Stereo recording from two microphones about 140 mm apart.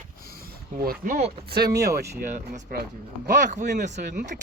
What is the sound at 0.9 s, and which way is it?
Speech, 75° right (ahead or behind).